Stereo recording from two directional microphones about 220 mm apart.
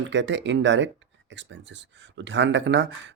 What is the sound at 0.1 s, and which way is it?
Speech, 55° right (ahead or behind).